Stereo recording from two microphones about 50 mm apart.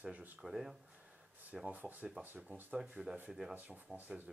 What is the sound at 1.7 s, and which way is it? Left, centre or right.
Speech, right.